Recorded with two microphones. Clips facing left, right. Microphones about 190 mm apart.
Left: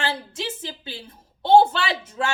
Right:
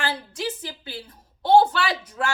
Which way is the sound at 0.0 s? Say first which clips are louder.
Even; 25° left (ahead or behind).